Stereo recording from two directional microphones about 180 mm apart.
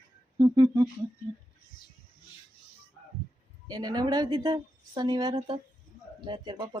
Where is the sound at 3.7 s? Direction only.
20° right (ahead or behind).